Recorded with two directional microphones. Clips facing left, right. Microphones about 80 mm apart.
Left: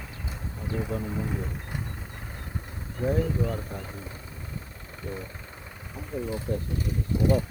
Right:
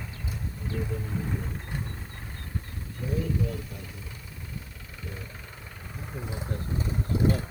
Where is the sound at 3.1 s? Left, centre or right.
Left.